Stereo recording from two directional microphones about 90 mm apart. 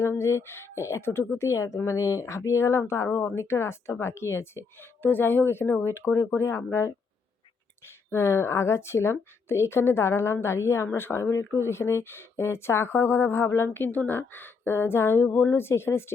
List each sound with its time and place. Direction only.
0.0 s speech: 30° left (ahead or behind)